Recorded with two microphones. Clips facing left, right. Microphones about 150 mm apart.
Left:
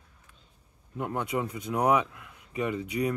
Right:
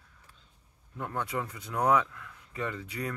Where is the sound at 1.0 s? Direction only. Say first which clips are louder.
Left 4 dB; 20° left (ahead or behind).